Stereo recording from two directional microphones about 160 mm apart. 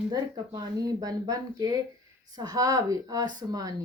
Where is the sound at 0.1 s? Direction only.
25° right (ahead or behind).